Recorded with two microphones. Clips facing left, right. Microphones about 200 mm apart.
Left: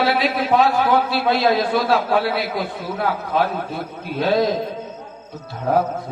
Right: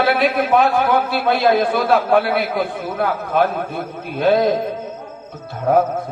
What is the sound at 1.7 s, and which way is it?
A man's voice, 55° right (ahead or behind).